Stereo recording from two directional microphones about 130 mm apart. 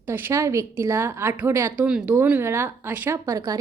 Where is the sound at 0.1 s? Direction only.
15° right (ahead or behind).